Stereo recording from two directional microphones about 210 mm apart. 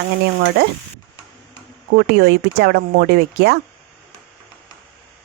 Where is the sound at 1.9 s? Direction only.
50° right (ahead or behind).